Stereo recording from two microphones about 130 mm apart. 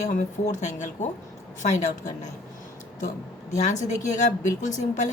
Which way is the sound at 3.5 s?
65° left (ahead or behind).